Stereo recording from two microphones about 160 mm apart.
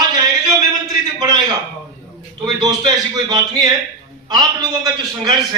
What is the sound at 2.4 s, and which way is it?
A man's voice, 25° right (ahead or behind).